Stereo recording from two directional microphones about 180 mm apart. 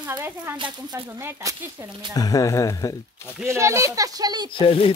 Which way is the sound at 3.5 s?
15° right (ahead or behind).